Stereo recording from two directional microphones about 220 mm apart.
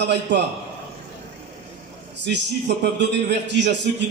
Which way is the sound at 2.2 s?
50° right (ahead or behind).